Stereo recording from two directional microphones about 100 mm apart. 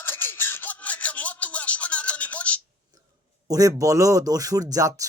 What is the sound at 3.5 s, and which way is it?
Speech, 35° right (ahead or behind).